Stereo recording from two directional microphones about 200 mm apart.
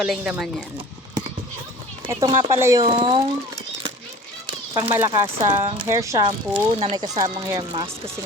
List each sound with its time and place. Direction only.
0.0 s speech: 5° right (ahead or behind)
2.0 s speech: 15° right (ahead or behind)
2.9 s speech: 25° right (ahead or behind)
4.7 s speech: 15° right (ahead or behind)
5.4 s speech: 30° right (ahead or behind)
5.9 s speech: 15° right (ahead or behind)